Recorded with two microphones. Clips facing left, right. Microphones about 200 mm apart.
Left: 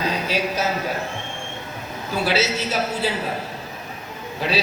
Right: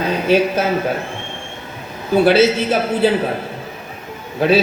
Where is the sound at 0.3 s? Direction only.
55° right (ahead or behind).